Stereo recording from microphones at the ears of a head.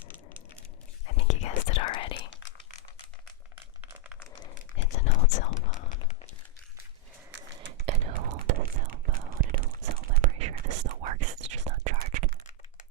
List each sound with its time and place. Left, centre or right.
1.0 s whispering: left
4.4 s typing: left
7.5 s whispering: right